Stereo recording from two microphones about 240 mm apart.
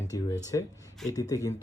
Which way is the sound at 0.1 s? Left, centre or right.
Centre.